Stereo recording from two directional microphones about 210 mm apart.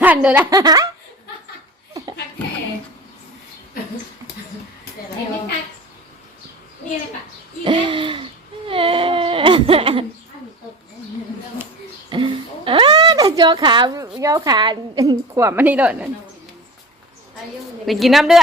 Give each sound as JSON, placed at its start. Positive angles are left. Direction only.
{"t": 0.0, "sound": "speech", "side_deg": -5}
{"t": 0.5, "sound": "a woman's voice", "side_deg": -15}
{"t": 7.6, "sound": "baby cry", "side_deg": -25}
{"t": 12.1, "sound": "a sound", "side_deg": -25}
{"t": 14.2, "sound": "a woman's voice", "side_deg": -15}
{"t": 17.8, "sound": "a woman's voice", "side_deg": 0}